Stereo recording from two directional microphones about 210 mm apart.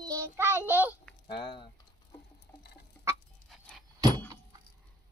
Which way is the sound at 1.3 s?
20° left (ahead or behind).